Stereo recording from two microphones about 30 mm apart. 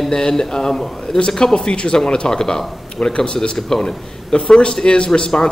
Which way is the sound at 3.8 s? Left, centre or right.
Left.